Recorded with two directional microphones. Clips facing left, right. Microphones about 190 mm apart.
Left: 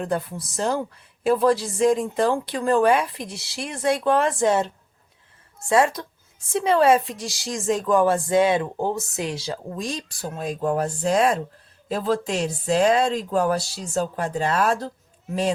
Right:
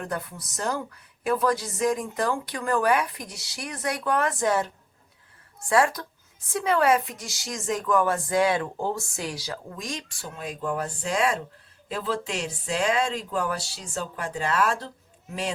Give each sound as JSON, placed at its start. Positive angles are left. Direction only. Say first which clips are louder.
{"t": 0.0, "sound": "speech", "louder": "left 6 dB", "side_deg": 30}